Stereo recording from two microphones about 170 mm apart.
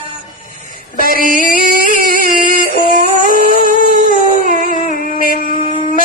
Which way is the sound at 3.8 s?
55° right (ahead or behind).